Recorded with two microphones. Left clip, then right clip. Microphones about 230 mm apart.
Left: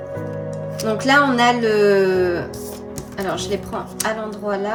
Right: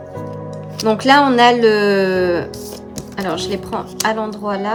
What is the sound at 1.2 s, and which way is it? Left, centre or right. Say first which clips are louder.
Speech: right 5 dB; centre.